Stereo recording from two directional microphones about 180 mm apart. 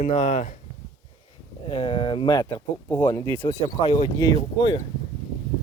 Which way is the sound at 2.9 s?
15° left (ahead or behind).